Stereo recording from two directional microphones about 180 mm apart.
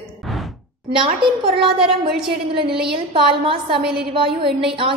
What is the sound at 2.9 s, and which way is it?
A woman's voice, 30° right (ahead or behind).